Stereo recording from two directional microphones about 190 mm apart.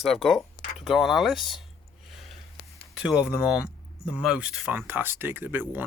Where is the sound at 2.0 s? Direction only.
Centre (ahead or behind).